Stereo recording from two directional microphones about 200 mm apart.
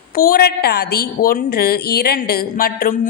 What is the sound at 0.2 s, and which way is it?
A woman's voice, 50° left (ahead or behind).